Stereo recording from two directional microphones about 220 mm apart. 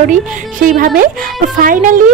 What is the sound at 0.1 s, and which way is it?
A woman's voice, 40° right (ahead or behind).